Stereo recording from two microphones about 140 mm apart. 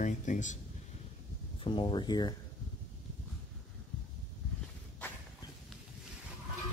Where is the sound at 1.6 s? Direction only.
35° left (ahead or behind).